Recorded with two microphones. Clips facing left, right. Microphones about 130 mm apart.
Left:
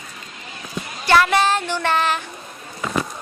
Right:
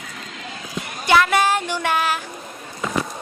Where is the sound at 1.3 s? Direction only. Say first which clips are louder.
Even; 10° right (ahead or behind).